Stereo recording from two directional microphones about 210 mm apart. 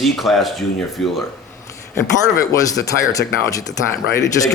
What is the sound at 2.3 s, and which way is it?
Speech, 15° left (ahead or behind).